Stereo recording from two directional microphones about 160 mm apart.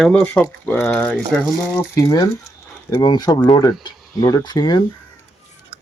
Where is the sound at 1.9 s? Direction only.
20° left (ahead or behind).